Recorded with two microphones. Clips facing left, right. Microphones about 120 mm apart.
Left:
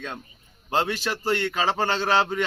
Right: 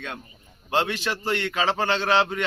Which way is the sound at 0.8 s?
Centre (ahead or behind).